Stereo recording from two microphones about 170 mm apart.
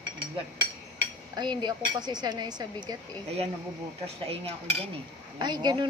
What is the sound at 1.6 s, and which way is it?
Speech, 25° right (ahead or behind).